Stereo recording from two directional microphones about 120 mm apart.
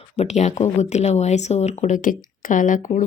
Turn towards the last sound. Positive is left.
turn(degrees=90)